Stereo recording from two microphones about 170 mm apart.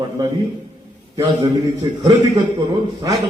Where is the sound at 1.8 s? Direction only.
25° right (ahead or behind).